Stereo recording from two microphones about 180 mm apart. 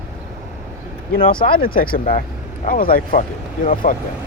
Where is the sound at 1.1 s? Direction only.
50° left (ahead or behind).